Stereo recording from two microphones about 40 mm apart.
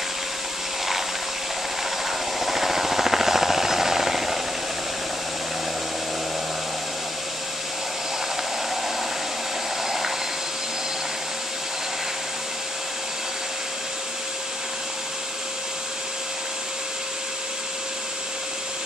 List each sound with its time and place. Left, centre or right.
2.0 s helicopter: centre